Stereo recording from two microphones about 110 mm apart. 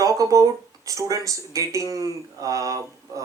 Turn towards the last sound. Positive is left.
turn(degrees=-30)  # may be behind; listen again after turning